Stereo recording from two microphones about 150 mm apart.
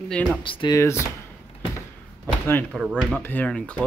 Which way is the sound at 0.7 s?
20° left (ahead or behind).